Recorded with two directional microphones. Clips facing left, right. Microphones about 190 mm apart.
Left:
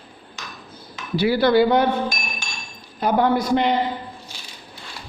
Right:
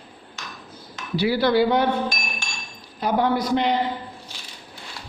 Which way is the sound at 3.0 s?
55° left (ahead or behind).